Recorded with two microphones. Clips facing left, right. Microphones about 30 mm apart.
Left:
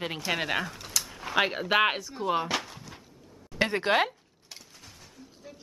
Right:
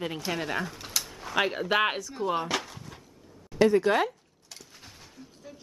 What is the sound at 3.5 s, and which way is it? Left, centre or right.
Speech, left.